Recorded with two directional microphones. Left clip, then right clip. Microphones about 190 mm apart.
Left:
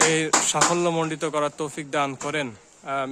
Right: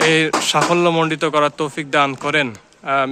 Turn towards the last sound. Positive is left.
turn(degrees=0)  # may be behind; listen again after turning